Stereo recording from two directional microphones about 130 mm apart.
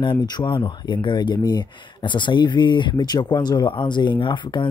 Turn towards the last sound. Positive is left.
turn(degrees=35)  # may be behind; listen again after turning